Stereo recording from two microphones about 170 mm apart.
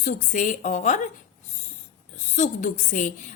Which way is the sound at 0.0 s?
50° left (ahead or behind).